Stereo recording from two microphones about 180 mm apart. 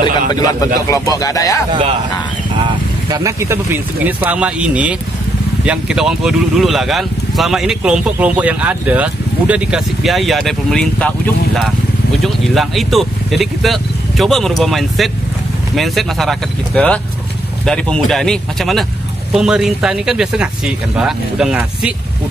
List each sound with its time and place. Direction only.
0.3 s speech: 20° left (ahead or behind)
3.1 s speech: 15° right (ahead or behind)